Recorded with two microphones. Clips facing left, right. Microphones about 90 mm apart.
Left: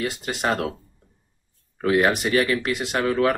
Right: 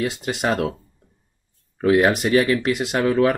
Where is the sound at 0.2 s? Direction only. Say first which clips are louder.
Right 2 dB; 10° right (ahead or behind).